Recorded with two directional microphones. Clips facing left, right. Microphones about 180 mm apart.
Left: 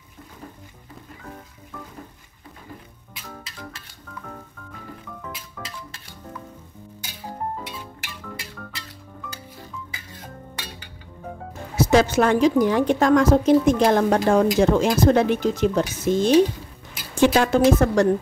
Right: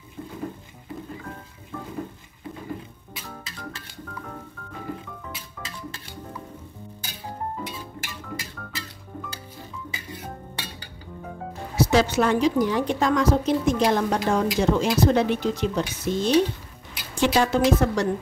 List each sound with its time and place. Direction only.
11.7 s a woman's voice: 50° left (ahead or behind)